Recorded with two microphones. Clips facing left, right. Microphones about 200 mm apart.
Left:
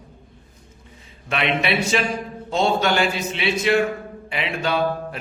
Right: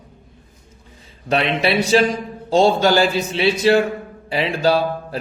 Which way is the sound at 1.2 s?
35° right (ahead or behind).